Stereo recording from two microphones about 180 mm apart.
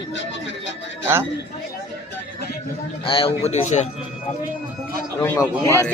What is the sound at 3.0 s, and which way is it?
Speech, 30° left (ahead or behind).